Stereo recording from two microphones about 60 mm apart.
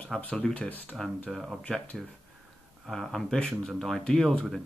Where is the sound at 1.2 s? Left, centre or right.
Centre.